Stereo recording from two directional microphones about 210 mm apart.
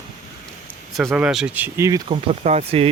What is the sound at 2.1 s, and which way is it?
Speech, 30° right (ahead or behind).